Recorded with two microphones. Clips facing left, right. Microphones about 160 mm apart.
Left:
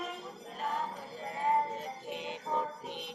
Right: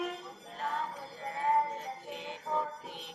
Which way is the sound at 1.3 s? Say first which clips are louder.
Right 1 dB; 20° left (ahead or behind).